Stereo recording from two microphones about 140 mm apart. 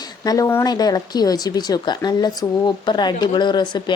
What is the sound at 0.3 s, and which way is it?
Speech, 25° left (ahead or behind).